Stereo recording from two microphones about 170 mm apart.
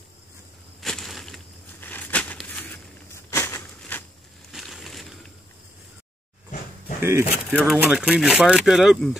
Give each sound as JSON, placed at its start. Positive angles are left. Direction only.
{"t": 0.7, "sound": "crushing", "side_deg": 0}
{"t": 1.8, "sound": "a sound", "side_deg": 10}
{"t": 3.3, "sound": "crushing", "side_deg": 15}
{"t": 4.5, "sound": "crushing", "side_deg": 0}
{"t": 7.0, "sound": "speech", "side_deg": -15}